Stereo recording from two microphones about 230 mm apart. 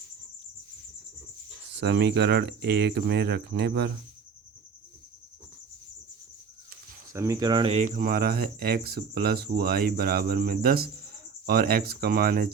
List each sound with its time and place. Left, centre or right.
1.7 s speech: right
7.1 s speech: centre; by 12.5 s right